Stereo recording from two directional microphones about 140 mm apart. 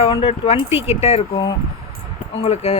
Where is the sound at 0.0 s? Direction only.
45° left (ahead or behind).